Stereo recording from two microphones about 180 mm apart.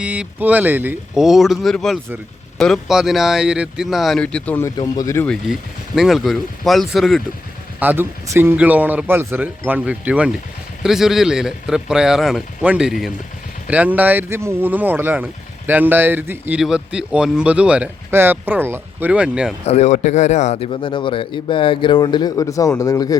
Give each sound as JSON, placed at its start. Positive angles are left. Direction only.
{"t": 0.0, "sound": "a man's voice", "side_deg": -5}
{"t": 6.0, "sound": "a man's voice", "side_deg": 0}
{"t": 7.8, "sound": "a man's voice", "side_deg": -10}
{"t": 19.6, "sound": "a man's voice", "side_deg": 40}